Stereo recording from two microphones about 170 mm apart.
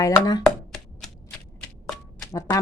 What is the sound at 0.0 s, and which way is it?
Speech, 20° left (ahead or behind).